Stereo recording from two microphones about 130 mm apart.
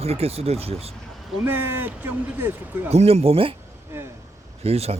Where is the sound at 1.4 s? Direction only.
15° right (ahead or behind).